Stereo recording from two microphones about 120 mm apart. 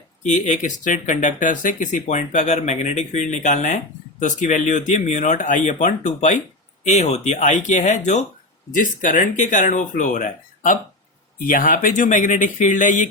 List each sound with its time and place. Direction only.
0.2 s speech: 80° left
6.8 s speech: 70° left (ahead or behind); by 13.1 s 90° left